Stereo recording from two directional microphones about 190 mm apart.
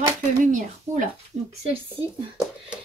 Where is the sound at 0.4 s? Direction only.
40° right (ahead or behind).